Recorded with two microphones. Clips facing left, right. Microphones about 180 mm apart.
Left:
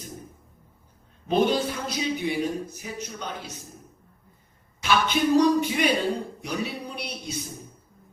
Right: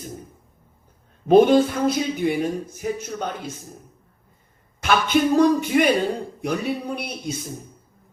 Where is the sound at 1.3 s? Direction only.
50° right (ahead or behind).